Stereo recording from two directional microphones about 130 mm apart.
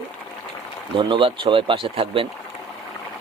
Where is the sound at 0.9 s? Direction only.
40° right (ahead or behind).